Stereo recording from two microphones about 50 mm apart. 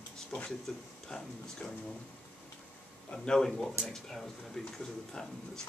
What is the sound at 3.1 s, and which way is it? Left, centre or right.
Speech, centre.